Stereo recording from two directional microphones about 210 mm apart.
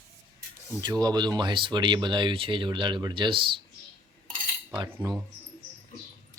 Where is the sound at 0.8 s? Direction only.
20° right (ahead or behind).